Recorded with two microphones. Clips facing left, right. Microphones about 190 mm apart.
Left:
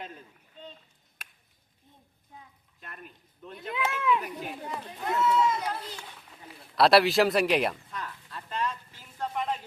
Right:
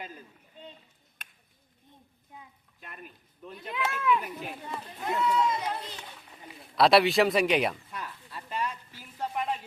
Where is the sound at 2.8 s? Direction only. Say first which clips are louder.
Even; 5° right (ahead or behind).